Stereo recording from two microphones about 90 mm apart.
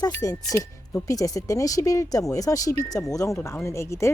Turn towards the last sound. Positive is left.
turn(degrees=30)  # may be behind; listen again after turning